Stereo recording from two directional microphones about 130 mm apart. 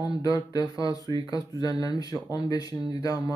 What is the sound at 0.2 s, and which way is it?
Speech, 30° left (ahead or behind).